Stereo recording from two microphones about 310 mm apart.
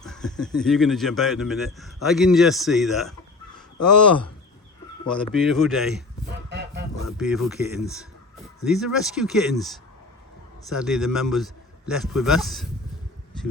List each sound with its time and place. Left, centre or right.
0.0 s speech: centre
5.0 s speech: centre
6.2 s a sound: right
7.2 s speech: centre
10.7 s speech: centre